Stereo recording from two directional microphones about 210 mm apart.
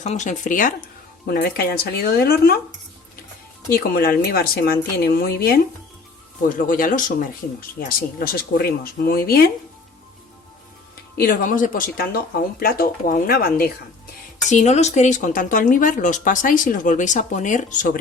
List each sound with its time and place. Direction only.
0.0 s speech: 35° left (ahead or behind)
3.7 s speech: 45° left (ahead or behind)
6.6 s speech: 40° left (ahead or behind)
11.2 s speech: 45° left (ahead or behind)
14.4 s speech: 35° left (ahead or behind)